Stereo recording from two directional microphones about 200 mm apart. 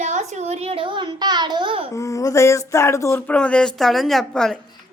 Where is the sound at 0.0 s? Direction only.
35° right (ahead or behind).